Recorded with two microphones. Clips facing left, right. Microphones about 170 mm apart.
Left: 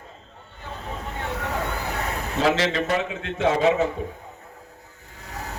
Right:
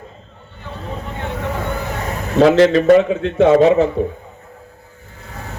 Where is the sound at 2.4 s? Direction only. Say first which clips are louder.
Right 11 dB; 55° right (ahead or behind).